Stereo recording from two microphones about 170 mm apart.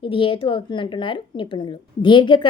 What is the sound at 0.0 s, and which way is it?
A woman's voice, 30° left (ahead or behind).